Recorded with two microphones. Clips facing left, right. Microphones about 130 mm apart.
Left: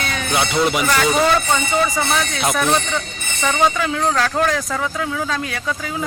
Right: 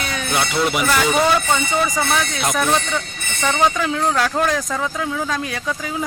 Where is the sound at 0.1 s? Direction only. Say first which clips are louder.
Left 1 dB; 15° right (ahead or behind).